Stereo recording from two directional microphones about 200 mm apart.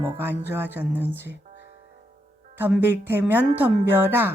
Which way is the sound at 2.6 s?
10° right (ahead or behind).